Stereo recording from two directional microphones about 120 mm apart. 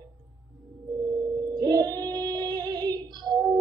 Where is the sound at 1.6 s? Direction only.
35° right (ahead or behind).